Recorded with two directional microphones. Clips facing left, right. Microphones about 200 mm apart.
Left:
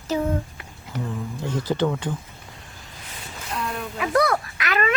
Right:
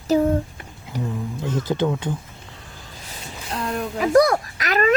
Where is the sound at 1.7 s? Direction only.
10° right (ahead or behind).